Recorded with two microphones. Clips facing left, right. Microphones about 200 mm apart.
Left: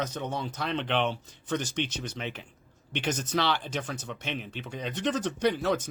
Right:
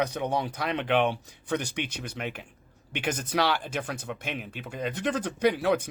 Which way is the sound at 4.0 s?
55° right (ahead or behind).